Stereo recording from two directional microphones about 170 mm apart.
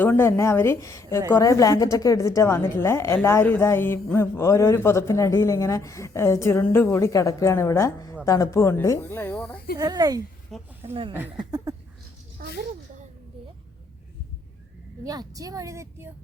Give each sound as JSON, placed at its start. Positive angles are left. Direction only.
{"t": 0.0, "sound": "a woman's voice", "side_deg": 10}
{"t": 9.7, "sound": "a woman's voice", "side_deg": -20}
{"t": 10.5, "sound": "speech", "side_deg": 0}
{"t": 11.1, "sound": "speech", "side_deg": -10}
{"t": 11.7, "sound": "a sound", "side_deg": -20}
{"t": 12.4, "sound": "a sound", "side_deg": -60}
{"t": 15.0, "sound": "a woman's voice", "side_deg": -20}